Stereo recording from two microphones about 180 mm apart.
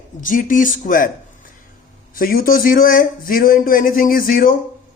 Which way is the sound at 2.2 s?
50° left (ahead or behind).